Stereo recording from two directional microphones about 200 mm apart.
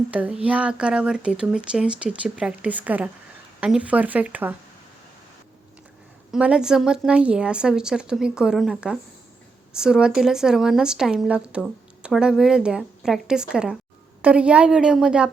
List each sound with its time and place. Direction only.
0.1 s speech: 5° right (ahead or behind)
6.3 s speech: 5° right (ahead or behind)